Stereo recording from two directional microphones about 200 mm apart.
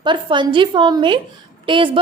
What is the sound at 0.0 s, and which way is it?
A woman's voice, 25° right (ahead or behind).